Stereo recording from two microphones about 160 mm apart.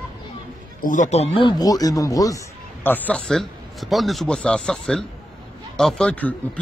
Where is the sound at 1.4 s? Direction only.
25° left (ahead or behind).